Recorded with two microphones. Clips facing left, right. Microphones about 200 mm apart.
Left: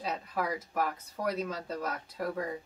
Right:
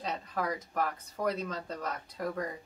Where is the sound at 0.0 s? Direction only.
10° left (ahead or behind).